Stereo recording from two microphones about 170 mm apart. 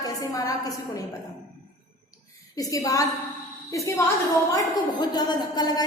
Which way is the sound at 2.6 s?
20° left (ahead or behind).